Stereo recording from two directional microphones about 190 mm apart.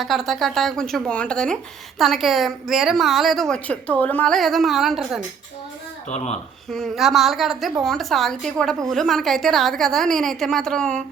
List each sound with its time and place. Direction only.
0.0 s a woman's voice: centre (ahead or behind)
6.1 s speech: 35° left (ahead or behind)
6.7 s a woman's voice: centre (ahead or behind)